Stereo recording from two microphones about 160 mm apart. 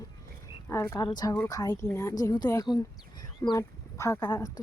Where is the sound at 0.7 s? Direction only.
20° left (ahead or behind).